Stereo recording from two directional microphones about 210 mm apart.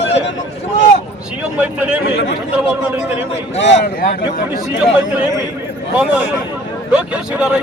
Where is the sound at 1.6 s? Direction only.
5° right (ahead or behind).